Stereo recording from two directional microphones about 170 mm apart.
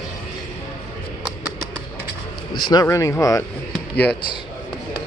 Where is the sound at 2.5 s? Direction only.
25° left (ahead or behind).